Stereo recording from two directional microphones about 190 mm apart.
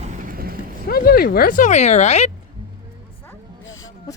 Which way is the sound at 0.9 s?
50° left (ahead or behind).